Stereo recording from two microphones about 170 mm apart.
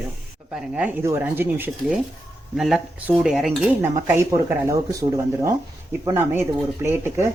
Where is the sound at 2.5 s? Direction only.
5° right (ahead or behind).